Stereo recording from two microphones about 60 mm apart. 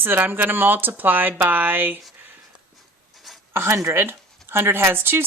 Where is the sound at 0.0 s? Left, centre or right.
Right.